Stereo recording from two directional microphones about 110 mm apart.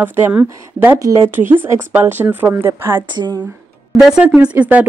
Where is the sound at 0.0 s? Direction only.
15° right (ahead or behind).